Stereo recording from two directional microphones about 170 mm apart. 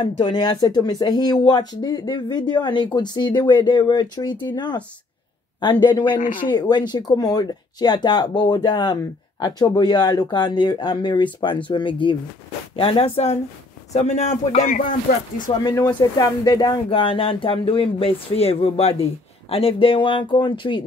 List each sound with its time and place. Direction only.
0.2 s speech: 25° left (ahead or behind); by 14.7 s 40° left (ahead or behind)
14.7 s speech: 50° left (ahead or behind)
15.6 s speech: 25° left (ahead or behind)